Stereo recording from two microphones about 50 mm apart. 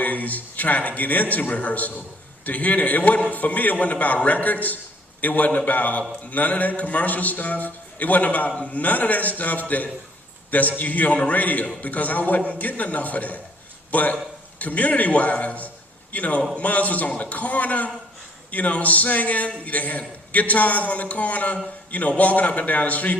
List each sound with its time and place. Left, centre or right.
0.0 s a man's voice: left